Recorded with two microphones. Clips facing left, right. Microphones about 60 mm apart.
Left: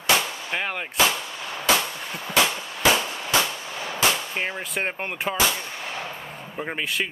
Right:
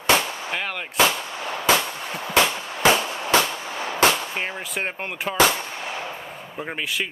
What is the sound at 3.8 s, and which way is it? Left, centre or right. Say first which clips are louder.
Gunshot: right 4 dB; right.